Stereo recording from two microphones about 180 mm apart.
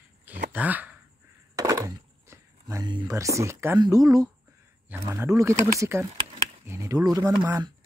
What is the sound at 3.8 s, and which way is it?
Speech, 20° right (ahead or behind).